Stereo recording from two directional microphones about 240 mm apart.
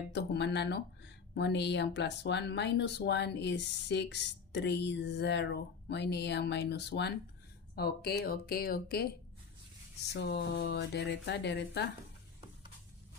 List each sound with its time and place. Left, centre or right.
0.1 s speech: left